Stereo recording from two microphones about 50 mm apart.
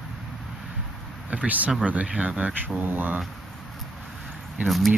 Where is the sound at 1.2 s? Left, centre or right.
Right.